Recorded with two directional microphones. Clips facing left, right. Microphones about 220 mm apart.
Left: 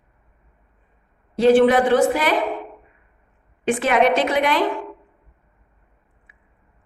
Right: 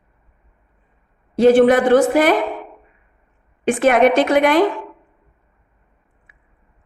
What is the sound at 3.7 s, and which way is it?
Speech, 50° right (ahead or behind).